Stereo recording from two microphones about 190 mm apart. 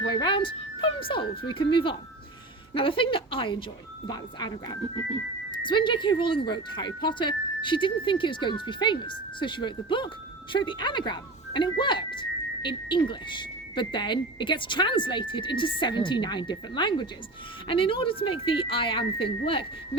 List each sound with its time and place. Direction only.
0.0 s speech: 20° left (ahead or behind)